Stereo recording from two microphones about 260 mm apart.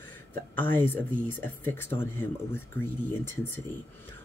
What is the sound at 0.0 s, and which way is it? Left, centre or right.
Speech, centre.